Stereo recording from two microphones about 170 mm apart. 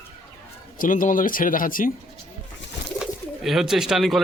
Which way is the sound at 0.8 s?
50° left (ahead or behind).